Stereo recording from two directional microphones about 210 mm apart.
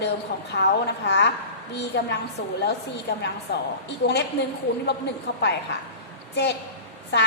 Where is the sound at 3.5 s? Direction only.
55° left (ahead or behind).